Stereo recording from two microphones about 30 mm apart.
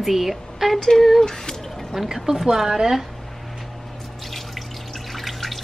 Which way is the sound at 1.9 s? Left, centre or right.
Centre.